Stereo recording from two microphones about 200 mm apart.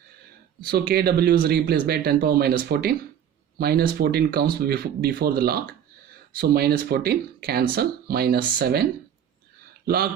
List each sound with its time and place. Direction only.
0.6 s speech: 50° right (ahead or behind)